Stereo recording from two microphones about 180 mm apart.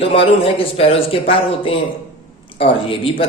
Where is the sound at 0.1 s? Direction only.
30° left (ahead or behind).